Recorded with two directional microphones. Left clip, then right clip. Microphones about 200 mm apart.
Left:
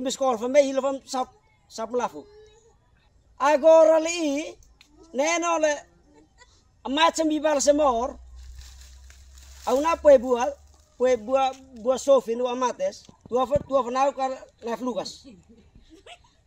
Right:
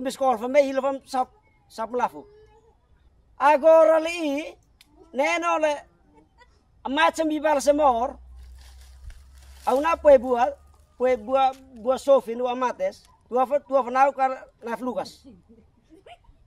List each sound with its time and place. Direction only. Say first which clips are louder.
0.0 s speech: right 1 dB; 5° right (ahead or behind)
3.3 s speech: even; 5° right (ahead or behind)
8.5 s a sound: left 4 dB; 35° right (ahead or behind)
9.7 s speech: even; centre (ahead or behind)